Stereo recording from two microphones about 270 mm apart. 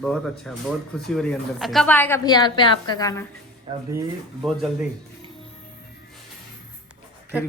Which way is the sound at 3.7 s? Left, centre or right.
Centre.